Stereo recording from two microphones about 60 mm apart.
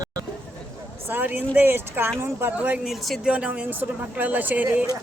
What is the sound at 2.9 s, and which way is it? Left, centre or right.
Speech, centre.